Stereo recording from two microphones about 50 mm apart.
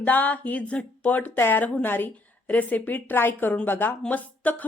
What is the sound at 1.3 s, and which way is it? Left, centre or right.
A woman's voice, left.